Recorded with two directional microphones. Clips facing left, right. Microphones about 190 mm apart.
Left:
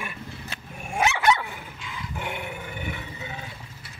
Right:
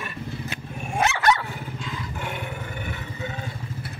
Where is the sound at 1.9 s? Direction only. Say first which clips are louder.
Left 1 dB; 15° left (ahead or behind).